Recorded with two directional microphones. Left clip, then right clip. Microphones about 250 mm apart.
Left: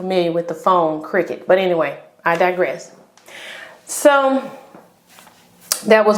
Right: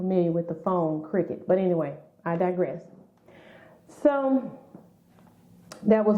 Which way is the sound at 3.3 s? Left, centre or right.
Centre.